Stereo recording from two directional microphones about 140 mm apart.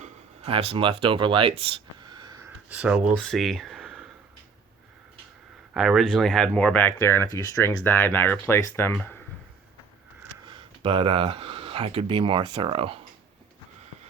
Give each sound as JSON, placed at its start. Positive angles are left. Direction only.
{"t": 0.0, "sound": "speech", "side_deg": -40}
{"t": 2.6, "sound": "speech", "side_deg": -10}
{"t": 3.2, "sound": "a sound", "side_deg": 0}
{"t": 5.7, "sound": "speech", "side_deg": 0}
{"t": 10.4, "sound": "speech", "side_deg": -40}